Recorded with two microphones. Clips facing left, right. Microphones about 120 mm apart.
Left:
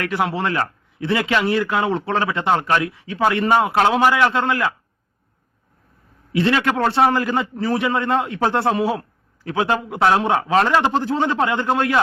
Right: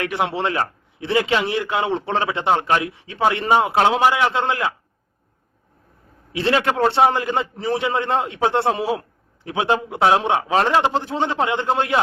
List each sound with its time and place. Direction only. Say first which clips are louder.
0.0 s a man's voice: even; 25° right (ahead or behind)
6.3 s a man's voice: left 1 dB; 30° right (ahead or behind)
8.8 s a man's voice: left 2 dB; 30° left (ahead or behind)
9.4 s a man's voice: even; 20° right (ahead or behind)